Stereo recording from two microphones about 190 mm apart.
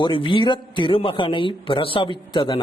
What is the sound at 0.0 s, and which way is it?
A man's voice, 25° left (ahead or behind).